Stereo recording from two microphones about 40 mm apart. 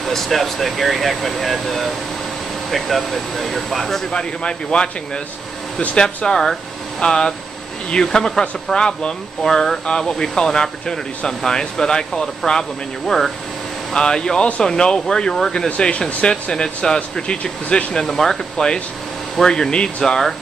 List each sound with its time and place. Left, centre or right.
0.0 s speech: centre
4.1 s speech: left; by 13.3 s centre
13.9 s speech: centre
18.0 s speech: centre
20.0 s speech: centre